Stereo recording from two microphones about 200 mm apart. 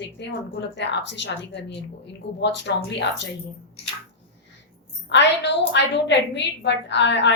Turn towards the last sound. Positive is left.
turn(degrees=60)  # may be behind; listen again after turning